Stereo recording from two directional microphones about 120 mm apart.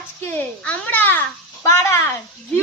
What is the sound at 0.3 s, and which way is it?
A child's voice, 10° left (ahead or behind).